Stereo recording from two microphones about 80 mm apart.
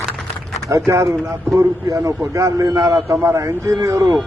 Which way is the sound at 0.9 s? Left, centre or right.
Right.